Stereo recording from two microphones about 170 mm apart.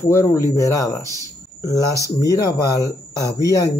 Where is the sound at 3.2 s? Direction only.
20° left (ahead or behind).